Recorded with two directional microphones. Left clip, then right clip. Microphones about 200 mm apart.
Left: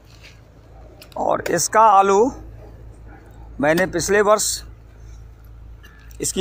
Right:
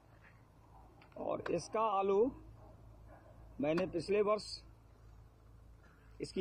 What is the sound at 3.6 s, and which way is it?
Speech, 40° left (ahead or behind).